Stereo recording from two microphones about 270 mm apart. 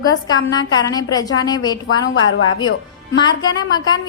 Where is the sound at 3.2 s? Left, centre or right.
Centre.